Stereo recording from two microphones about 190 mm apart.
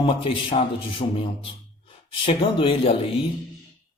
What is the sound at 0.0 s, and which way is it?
Speech, 30° left (ahead or behind).